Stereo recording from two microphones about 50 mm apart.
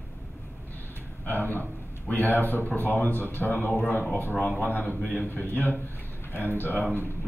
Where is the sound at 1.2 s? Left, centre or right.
Left.